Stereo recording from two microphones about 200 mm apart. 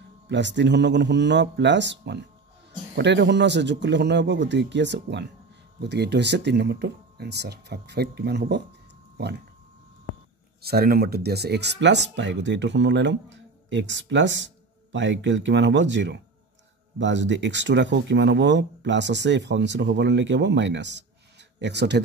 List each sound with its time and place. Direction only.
0.3 s speech: 60° right (ahead or behind)
10.6 s speech: 50° right (ahead or behind)